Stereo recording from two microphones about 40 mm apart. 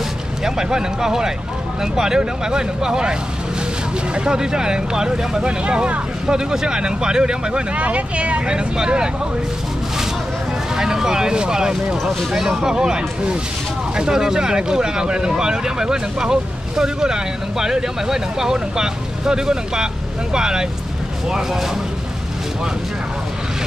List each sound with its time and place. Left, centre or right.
0.4 s speech: centre
7.7 s speech: right; by 9.1 s centre
10.8 s speech: centre
12.0 s speech: centre